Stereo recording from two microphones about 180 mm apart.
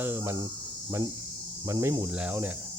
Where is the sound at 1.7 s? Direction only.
20° right (ahead or behind).